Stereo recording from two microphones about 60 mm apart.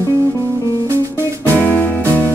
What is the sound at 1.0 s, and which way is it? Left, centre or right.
Music, right.